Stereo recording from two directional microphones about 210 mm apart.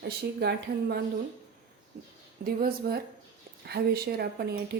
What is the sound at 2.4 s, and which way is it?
Speech, 45° right (ahead or behind).